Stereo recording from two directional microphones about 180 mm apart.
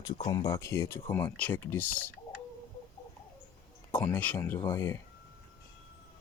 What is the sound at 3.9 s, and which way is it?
Speech, 10° left (ahead or behind).